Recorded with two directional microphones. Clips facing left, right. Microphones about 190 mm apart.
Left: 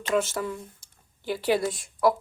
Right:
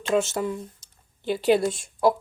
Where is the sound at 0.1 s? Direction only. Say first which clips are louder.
Right 3 dB; 25° right (ahead or behind).